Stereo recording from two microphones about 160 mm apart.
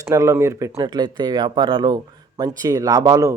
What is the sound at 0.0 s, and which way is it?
A man's voice, 20° right (ahead or behind).